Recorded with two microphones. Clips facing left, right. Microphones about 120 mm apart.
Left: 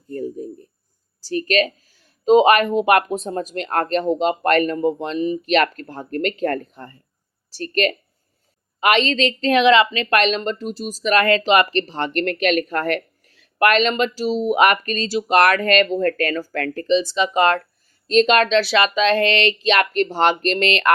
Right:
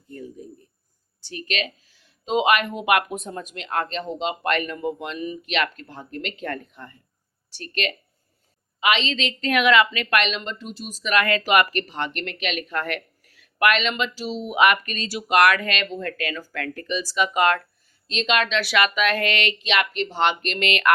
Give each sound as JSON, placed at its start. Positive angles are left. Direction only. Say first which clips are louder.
{"t": 0.1, "sound": "a sound", "louder": "left 10 dB", "side_deg": 40}
{"t": 1.2, "sound": "a woman's voice", "louder": "left 10 dB", "side_deg": 40}
{"t": 5.5, "sound": "a woman's voice", "louder": "left 6 dB", "side_deg": 45}
{"t": 16.8, "sound": "speech", "louder": "left 6 dB", "side_deg": 25}
{"t": 18.1, "sound": "a woman's voice", "louder": "left 8 dB", "side_deg": 45}